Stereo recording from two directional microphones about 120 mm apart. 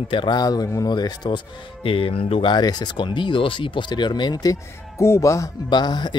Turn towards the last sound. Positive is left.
turn(degrees=35)  # may be behind; listen again after turning